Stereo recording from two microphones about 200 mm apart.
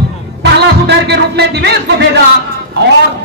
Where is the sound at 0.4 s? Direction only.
55° right (ahead or behind).